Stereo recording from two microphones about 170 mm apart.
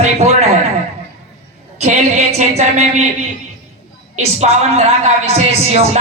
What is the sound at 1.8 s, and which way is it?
Speech, 40° right (ahead or behind).